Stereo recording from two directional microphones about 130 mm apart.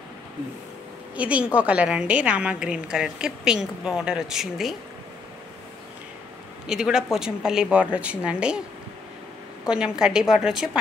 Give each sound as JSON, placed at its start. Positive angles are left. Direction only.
{"t": 1.1, "sound": "a woman's voice", "side_deg": -10}
{"t": 6.7, "sound": "speech", "side_deg": -5}
{"t": 9.7, "sound": "speech", "side_deg": -5}